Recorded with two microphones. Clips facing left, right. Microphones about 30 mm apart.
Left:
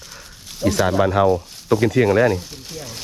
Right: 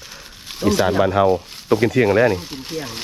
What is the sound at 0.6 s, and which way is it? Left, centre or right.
Speech, right.